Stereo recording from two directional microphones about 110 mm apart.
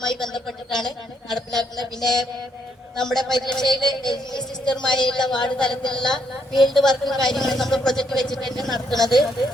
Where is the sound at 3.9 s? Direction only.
40° left (ahead or behind).